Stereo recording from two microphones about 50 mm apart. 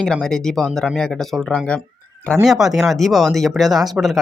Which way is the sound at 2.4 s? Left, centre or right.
Centre.